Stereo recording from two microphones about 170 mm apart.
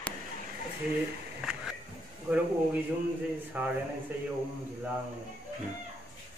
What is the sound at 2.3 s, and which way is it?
Speech, centre (ahead or behind).